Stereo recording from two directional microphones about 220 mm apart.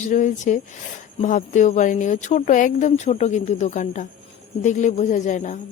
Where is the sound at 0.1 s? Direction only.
35° left (ahead or behind).